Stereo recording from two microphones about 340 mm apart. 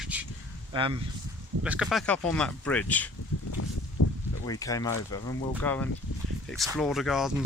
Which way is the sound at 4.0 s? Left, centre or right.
Left.